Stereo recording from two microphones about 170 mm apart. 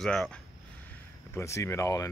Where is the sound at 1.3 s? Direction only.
15° left (ahead or behind).